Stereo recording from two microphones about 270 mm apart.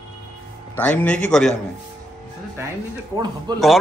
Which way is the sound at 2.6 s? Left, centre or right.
Centre.